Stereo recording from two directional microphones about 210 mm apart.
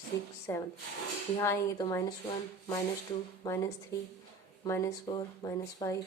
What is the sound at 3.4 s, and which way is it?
Speech, 15° left (ahead or behind).